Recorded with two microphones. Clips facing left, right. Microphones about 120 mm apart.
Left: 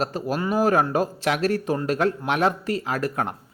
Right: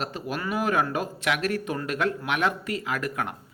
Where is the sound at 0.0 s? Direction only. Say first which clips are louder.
Left 6 dB; 40° left (ahead or behind).